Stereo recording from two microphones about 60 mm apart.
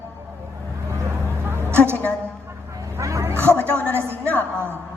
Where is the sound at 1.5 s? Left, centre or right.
Right.